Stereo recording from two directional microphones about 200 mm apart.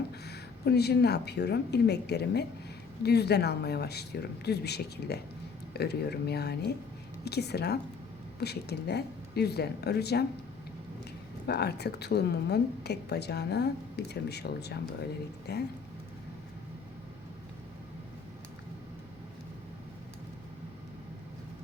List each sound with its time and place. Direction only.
0.3 s a woman's voice: 55° left (ahead or behind)
11.4 s a woman's voice: 55° left (ahead or behind)